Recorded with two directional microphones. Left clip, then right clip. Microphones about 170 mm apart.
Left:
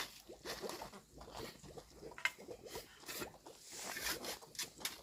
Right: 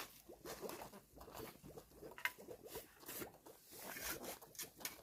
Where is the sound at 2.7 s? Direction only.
20° right (ahead or behind).